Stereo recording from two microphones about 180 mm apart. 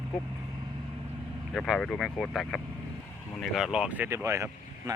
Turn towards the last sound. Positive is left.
turn(degrees=-15)  # may be behind; listen again after turning